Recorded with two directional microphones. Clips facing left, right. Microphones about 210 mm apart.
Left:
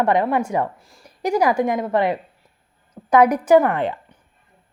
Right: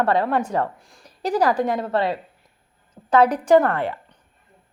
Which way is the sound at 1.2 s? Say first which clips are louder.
Left 2 dB; 10° left (ahead or behind).